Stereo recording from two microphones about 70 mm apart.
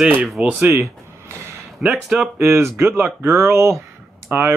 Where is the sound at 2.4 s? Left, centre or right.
Right.